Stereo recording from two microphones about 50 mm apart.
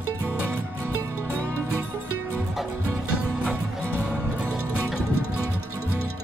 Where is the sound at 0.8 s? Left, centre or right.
Right.